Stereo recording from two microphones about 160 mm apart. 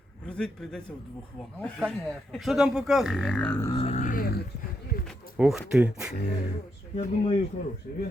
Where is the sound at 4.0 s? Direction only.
65° left (ahead or behind).